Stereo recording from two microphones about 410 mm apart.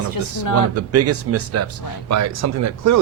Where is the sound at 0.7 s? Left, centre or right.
Right.